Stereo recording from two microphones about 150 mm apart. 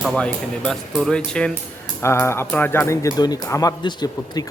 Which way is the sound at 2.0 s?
15° left (ahead or behind).